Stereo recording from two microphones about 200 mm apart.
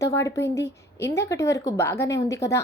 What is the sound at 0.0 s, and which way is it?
Speech, 15° left (ahead or behind).